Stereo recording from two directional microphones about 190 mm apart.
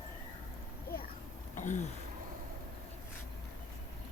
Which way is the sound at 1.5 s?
40° left (ahead or behind).